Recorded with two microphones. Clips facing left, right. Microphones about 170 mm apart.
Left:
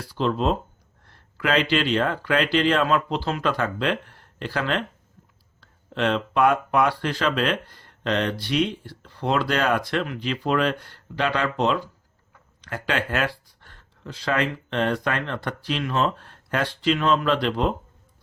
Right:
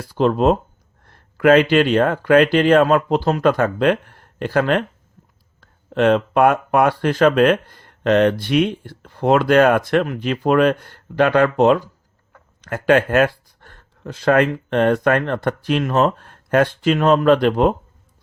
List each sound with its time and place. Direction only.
0.0 s speech: 50° right (ahead or behind)